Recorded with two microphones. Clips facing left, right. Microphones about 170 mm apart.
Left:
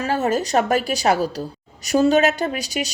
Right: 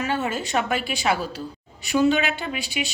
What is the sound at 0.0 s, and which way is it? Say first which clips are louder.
A woman's voice: left 5 dB; 40° left (ahead or behind).